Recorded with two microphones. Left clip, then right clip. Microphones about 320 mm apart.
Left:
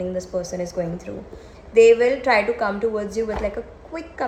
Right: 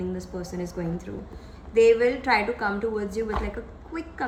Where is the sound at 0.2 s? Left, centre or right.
Left.